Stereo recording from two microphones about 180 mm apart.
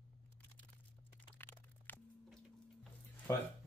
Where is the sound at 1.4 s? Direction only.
10° left (ahead or behind).